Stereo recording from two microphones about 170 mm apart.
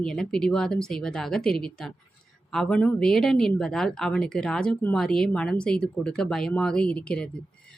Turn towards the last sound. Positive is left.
turn(degrees=5)  # may be behind; listen again after turning